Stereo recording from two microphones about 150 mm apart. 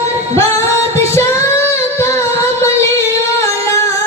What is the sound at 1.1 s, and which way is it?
Female singing, 15° left (ahead or behind).